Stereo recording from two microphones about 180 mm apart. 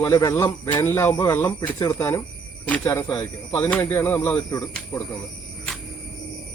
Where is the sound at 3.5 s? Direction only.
10° left (ahead or behind).